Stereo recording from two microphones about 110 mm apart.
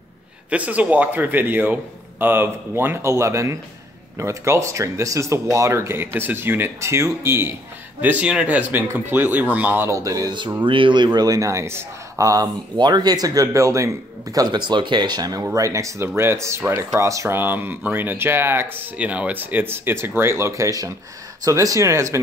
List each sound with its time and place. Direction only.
0.5 s speech: 15° right (ahead or behind); by 10.3 s 30° right (ahead or behind)
10.6 s a man's voice: 50° right (ahead or behind); by 12.4 s 30° right (ahead or behind)
12.7 s a man's voice: 40° right (ahead or behind)
14.3 s a man's voice: 40° right (ahead or behind)